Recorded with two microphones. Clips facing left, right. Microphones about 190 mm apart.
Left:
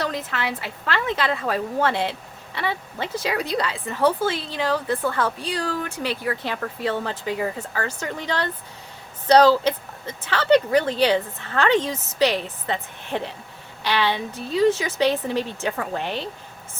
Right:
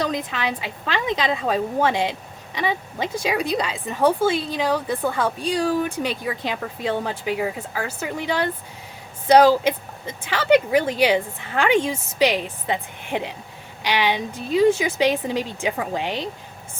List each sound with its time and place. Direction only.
0.0 s a woman's voice: 15° right (ahead or behind)